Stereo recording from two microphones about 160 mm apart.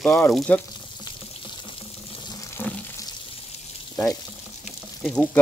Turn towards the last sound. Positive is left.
turn(degrees=5)  # may be behind; listen again after turning